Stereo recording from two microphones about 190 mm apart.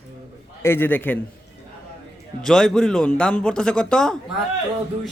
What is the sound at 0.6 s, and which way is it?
Speech, 10° left (ahead or behind).